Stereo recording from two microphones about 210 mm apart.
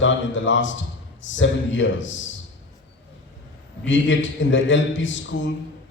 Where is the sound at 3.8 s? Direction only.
60° left (ahead or behind).